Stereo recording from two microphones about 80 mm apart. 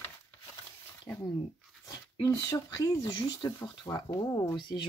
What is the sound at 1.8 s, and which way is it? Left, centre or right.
Dog, left.